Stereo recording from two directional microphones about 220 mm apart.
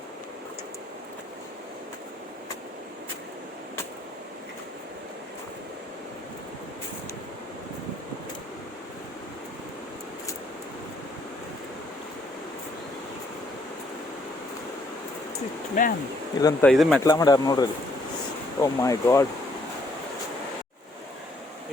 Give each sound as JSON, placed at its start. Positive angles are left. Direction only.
{"t": 15.8, "sound": "speech", "side_deg": 35}
{"t": 16.4, "sound": "speech", "side_deg": 15}
{"t": 16.6, "sound": "speech", "side_deg": 0}
{"t": 17.0, "sound": "speech", "side_deg": 15}